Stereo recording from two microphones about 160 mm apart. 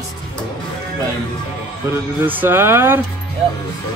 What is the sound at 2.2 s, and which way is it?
Music, 10° right (ahead or behind).